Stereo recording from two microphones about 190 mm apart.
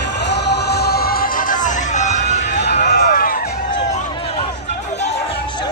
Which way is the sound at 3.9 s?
30° left (ahead or behind).